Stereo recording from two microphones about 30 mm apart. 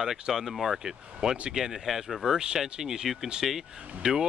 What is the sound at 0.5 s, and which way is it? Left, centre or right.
Speech, centre.